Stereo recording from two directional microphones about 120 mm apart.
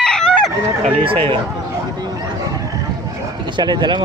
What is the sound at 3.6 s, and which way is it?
Speech, 40° right (ahead or behind).